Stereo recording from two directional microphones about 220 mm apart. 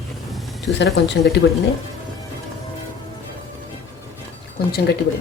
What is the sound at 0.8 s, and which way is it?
Speech, 50° left (ahead or behind).